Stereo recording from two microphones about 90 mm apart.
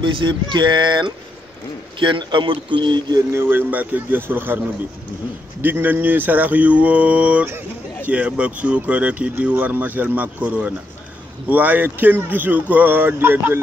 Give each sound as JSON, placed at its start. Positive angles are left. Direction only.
{"t": 0.0, "sound": "speech", "side_deg": -60}
{"t": 3.3, "sound": "speech", "side_deg": -25}
{"t": 5.6, "sound": "speech", "side_deg": -20}